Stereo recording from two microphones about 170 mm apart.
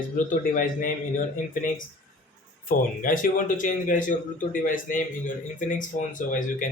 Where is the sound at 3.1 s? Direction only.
50° left (ahead or behind).